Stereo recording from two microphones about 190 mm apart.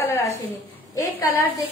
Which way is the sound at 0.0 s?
15° left (ahead or behind).